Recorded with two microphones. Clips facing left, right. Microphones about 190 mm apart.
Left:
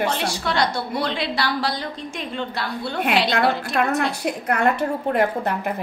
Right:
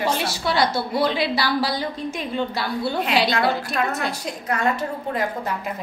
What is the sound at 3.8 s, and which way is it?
A woman's voice, 55° left (ahead or behind).